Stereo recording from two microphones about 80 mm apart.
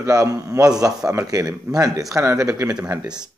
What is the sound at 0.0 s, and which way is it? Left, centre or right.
A man's voice, right.